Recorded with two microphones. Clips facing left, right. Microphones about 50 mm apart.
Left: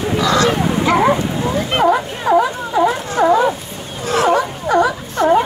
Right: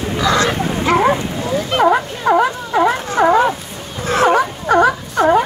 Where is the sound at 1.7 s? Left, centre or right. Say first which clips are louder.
Right 1 dB; left.